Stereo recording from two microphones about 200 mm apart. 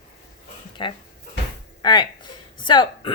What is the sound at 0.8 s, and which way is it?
Speech, 25° left (ahead or behind).